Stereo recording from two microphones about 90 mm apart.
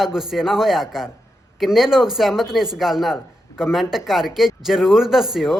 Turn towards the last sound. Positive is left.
turn(degrees=-5)  # may be behind; listen again after turning